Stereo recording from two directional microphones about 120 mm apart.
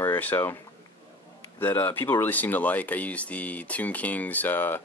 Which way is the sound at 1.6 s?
20° left (ahead or behind).